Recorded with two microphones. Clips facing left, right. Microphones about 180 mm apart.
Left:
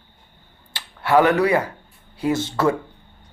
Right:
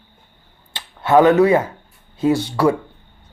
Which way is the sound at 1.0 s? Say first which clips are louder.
Right 4 dB; 20° right (ahead or behind).